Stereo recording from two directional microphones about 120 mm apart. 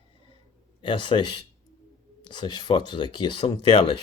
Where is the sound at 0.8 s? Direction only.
45° left (ahead or behind).